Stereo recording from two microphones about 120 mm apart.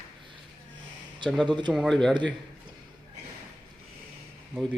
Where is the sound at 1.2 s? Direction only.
40° right (ahead or behind).